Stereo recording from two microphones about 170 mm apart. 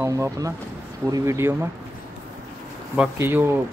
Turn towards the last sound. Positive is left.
turn(degrees=-15)  # may be behind; listen again after turning